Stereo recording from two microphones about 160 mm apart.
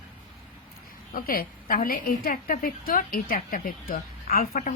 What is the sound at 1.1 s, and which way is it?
Speech, 65° left (ahead or behind).